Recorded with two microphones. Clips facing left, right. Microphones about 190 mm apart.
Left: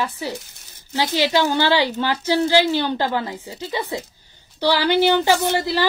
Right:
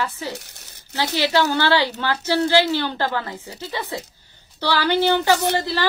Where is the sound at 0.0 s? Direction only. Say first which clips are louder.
Left 2 dB; 15° left (ahead or behind).